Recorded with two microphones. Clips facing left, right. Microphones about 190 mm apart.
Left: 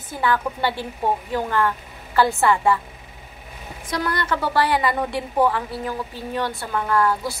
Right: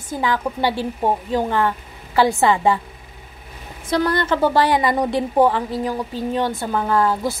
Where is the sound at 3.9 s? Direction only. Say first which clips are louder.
Right 6 dB; 25° right (ahead or behind).